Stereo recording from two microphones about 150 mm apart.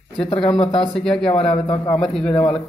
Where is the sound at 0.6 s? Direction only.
35° left (ahead or behind).